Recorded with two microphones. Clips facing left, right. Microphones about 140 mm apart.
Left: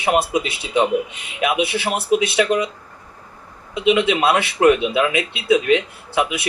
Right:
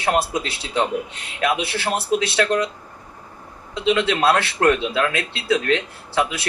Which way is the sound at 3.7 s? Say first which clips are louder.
Left 3 dB; 15° left (ahead or behind).